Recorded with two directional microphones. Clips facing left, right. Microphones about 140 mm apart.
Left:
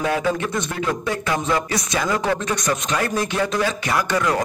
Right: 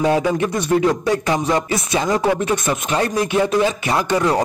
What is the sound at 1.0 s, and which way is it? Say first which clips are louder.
Speech: right 4 dB; 30° right (ahead or behind).